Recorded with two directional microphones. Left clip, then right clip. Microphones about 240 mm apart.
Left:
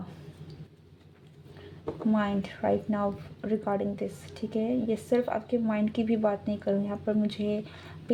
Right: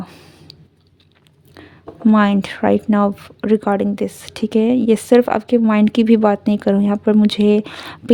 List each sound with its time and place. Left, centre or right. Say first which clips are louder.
2.0 s speech: right 15 dB; right